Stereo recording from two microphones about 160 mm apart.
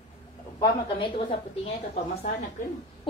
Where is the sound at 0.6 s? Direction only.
30° left (ahead or behind).